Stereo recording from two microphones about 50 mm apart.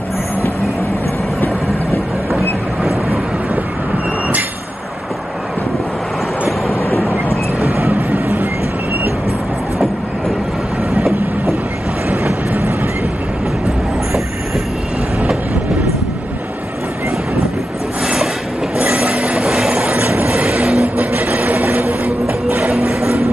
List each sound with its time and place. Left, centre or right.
2.3 s vehicle: centre
8.1 s train: right
10.9 s train: centre
12.3 s train: right
18.9 s train: centre
20.2 s vehicle: centre
21.0 s vehicle: right
22.7 s a sound: centre